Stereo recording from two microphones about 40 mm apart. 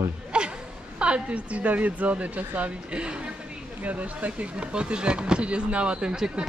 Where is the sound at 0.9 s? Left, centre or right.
Right.